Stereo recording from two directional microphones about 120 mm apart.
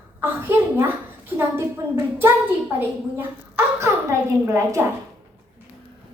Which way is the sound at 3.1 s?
20° right (ahead or behind).